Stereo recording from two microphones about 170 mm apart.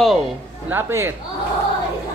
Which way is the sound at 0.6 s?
15° right (ahead or behind).